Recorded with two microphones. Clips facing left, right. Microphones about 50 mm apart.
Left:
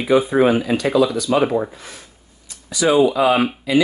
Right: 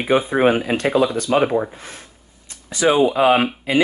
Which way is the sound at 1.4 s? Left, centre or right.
Right.